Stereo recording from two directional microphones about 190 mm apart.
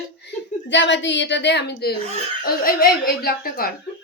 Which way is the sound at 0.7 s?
70° left (ahead or behind).